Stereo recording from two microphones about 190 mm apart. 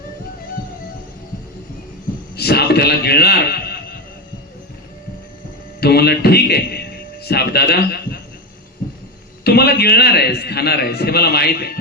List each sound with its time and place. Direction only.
2.3 s a man's voice: 55° left (ahead or behind)
5.8 s a man's voice: 55° left (ahead or behind)
9.4 s a man's voice: 55° left (ahead or behind)